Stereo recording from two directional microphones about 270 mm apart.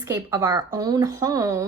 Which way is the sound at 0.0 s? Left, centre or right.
Centre.